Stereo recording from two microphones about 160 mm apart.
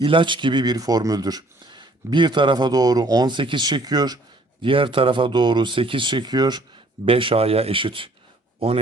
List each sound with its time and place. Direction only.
0.0 s speech: 30° right (ahead or behind)